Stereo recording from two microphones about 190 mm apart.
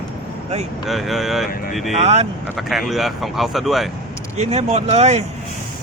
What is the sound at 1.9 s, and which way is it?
Speech, 35° right (ahead or behind).